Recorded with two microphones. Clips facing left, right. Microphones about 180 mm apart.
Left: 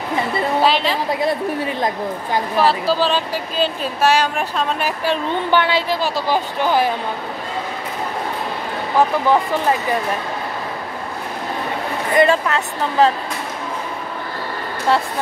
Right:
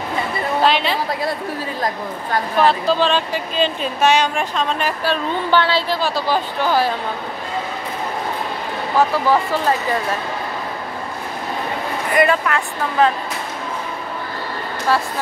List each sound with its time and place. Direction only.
0.7 s a woman's voice: centre (ahead or behind)
2.6 s speech: 5° left (ahead or behind)
12.2 s a woman's voice: 25° left (ahead or behind)
14.9 s a woman's voice: 25° left (ahead or behind)